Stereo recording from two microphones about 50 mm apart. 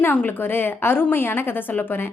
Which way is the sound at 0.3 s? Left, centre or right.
Left.